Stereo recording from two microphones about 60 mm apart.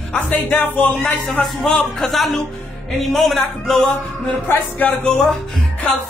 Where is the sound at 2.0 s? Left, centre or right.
Centre.